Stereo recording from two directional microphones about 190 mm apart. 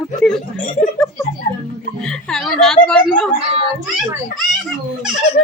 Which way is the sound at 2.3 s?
Centre (ahead or behind).